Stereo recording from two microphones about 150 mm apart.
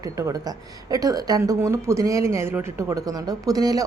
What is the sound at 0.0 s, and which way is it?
A woman's voice, 20° right (ahead or behind).